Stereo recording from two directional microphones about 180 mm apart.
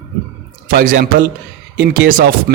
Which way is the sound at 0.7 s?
50° right (ahead or behind).